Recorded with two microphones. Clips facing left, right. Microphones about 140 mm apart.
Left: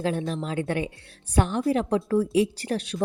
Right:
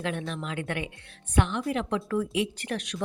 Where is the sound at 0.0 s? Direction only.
35° left (ahead or behind).